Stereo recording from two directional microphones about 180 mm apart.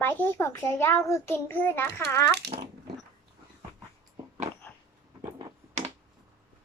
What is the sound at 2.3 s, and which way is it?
Speech, 65° right (ahead or behind).